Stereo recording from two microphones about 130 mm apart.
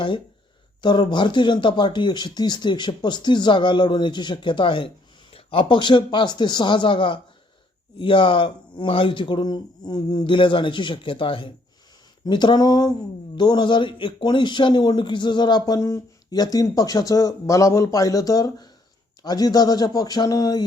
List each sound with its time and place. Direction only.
0.8 s speech: 35° left (ahead or behind)